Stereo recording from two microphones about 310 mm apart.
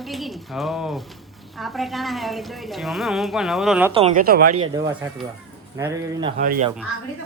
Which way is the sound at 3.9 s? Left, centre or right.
Right.